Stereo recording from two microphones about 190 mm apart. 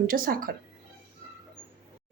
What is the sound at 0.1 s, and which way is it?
Speech, 50° right (ahead or behind).